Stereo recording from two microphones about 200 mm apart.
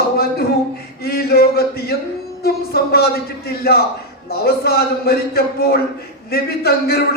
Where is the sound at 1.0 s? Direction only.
50° left (ahead or behind).